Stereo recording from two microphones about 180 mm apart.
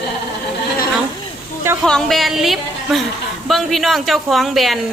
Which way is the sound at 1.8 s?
5° left (ahead or behind).